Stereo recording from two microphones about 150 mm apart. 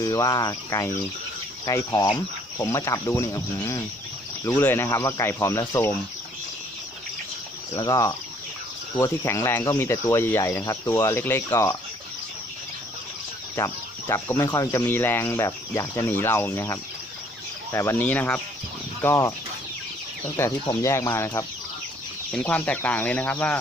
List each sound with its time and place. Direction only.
0.0 s speech: 25° left (ahead or behind)
7.7 s speech: 25° left (ahead or behind)
13.6 s speech: 15° left (ahead or behind)
20.8 s speech: 20° left (ahead or behind)